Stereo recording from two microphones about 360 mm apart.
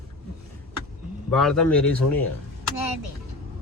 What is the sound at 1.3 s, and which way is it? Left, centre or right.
Speech, centre.